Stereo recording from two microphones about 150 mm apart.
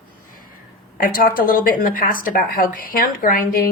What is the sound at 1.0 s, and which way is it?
A woman's voice, 70° left (ahead or behind).